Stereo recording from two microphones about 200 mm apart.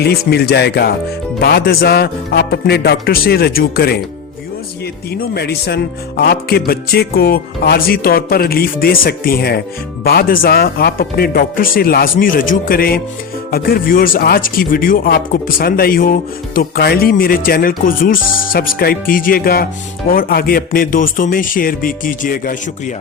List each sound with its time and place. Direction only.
0.0 s speech: 50° left (ahead or behind)
5.1 s speech: 50° left (ahead or behind)